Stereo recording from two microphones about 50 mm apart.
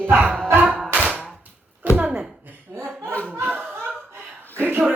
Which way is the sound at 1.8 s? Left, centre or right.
Right.